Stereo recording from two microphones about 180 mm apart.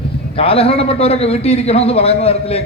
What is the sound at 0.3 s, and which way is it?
A man's voice, 30° left (ahead or behind).